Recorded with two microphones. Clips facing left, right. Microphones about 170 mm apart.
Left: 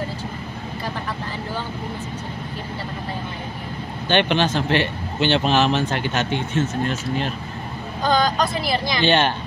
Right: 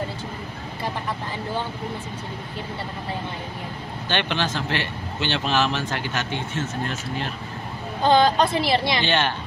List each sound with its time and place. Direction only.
4.1 s speech: 20° left (ahead or behind)
8.0 s speech: 25° right (ahead or behind)
9.0 s speech: 20° left (ahead or behind)